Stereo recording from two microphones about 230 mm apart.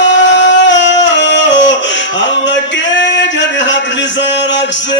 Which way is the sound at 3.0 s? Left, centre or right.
Left.